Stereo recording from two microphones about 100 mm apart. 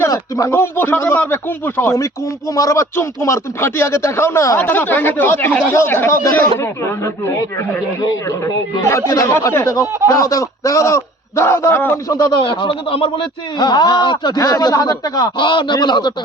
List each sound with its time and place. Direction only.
0.0 s a man's voice: 35° left (ahead or behind)
12.0 s a man's voice: 35° left (ahead or behind)
12.4 s speech: 60° left (ahead or behind)
13.6 s speech: 45° left (ahead or behind)